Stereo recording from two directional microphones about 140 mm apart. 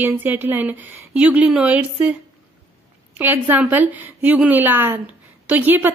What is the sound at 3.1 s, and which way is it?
Speech, 15° right (ahead or behind).